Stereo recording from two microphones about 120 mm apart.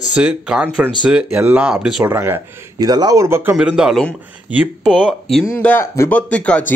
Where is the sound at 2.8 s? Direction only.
35° right (ahead or behind).